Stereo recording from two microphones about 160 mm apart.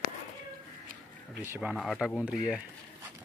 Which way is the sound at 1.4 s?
10° right (ahead or behind).